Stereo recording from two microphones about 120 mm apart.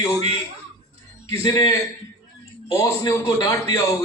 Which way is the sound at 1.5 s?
30° left (ahead or behind).